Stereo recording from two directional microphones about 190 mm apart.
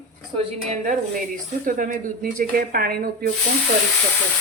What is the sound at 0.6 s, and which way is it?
Speech, 40° right (ahead or behind).